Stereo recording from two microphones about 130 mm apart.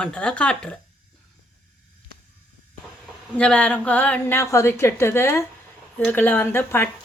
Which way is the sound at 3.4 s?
10° left (ahead or behind).